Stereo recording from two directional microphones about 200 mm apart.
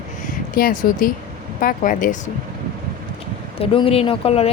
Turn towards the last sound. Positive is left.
turn(degrees=30)  # may be behind; listen again after turning